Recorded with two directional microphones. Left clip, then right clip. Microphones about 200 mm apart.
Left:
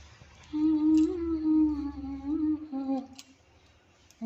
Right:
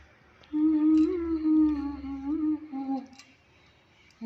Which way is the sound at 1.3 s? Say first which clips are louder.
Right 2 dB; 10° right (ahead or behind).